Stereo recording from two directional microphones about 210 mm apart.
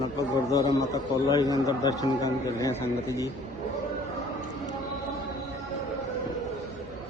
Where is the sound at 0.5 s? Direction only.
15° left (ahead or behind).